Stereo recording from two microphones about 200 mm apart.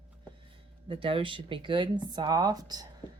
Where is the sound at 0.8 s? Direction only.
25° right (ahead or behind).